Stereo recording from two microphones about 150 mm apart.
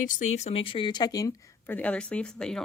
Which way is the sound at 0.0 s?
60° left (ahead or behind).